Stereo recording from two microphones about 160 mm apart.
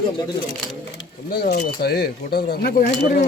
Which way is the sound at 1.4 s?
70° left (ahead or behind).